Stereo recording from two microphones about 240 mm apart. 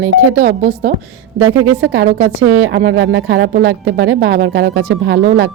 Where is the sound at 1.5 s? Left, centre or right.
Right.